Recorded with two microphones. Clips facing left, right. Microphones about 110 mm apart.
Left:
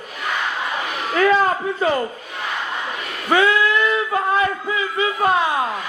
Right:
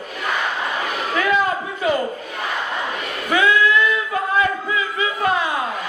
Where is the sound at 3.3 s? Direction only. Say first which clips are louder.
Even; 35° left (ahead or behind).